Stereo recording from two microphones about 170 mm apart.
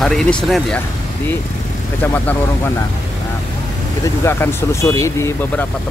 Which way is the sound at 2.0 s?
10° left (ahead or behind).